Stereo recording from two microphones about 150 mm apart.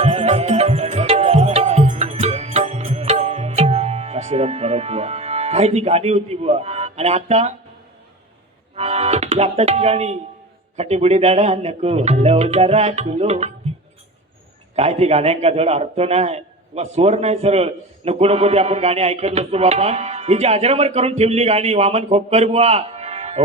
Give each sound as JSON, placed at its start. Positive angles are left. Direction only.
{"t": 0.0, "sound": "music", "side_deg": -45}
{"t": 8.7, "sound": "a man's voice", "side_deg": -45}
{"t": 14.8, "sound": "a man's voice", "side_deg": -45}